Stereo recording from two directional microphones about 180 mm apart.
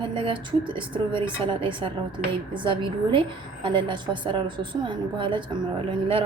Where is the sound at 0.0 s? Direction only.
25° right (ahead or behind).